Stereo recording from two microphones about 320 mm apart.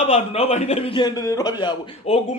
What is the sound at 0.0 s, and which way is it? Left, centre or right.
A man's voice, centre.